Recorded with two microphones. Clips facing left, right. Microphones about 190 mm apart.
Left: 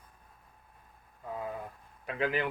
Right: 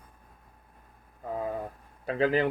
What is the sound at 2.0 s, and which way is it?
Speech, 35° right (ahead or behind).